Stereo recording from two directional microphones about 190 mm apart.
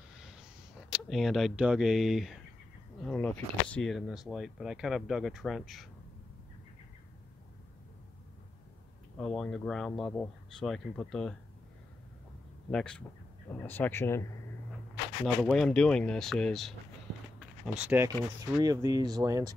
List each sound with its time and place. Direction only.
0.2 s speech: centre (ahead or behind)
9.2 s speech: 5° left (ahead or behind)
12.7 s speech: 5° left (ahead or behind)
15.2 s speech: centre (ahead or behind)
17.4 s a sound: 5° right (ahead or behind)
18.5 s speech: 20° right (ahead or behind)